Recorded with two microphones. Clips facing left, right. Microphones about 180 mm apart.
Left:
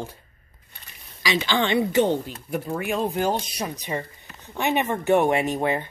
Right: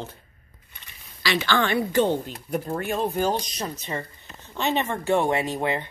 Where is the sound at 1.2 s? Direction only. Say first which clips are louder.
Even; 15° left (ahead or behind).